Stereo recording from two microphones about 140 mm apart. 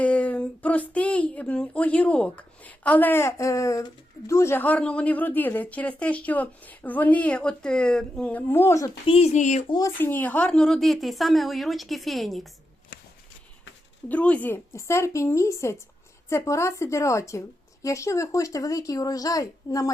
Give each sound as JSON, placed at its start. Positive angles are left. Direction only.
{"t": 0.0, "sound": "a woman's voice", "side_deg": 10}
{"t": 9.0, "sound": "speech", "side_deg": 45}
{"t": 9.8, "sound": "a woman's voice", "side_deg": 15}
{"t": 14.1, "sound": "speech", "side_deg": 10}